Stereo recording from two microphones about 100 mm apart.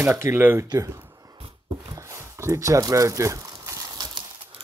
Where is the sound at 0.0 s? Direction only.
20° right (ahead or behind).